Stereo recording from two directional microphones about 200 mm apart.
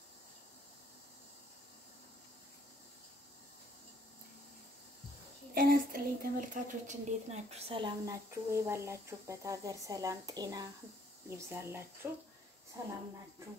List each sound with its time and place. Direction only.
5.5 s a woman's voice: 50° right (ahead or behind); by 12.9 s 15° right (ahead or behind)